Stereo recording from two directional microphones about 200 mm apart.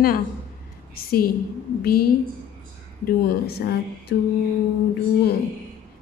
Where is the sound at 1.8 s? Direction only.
50° left (ahead or behind).